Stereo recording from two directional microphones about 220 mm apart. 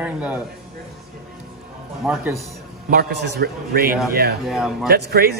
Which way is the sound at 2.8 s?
45° right (ahead or behind).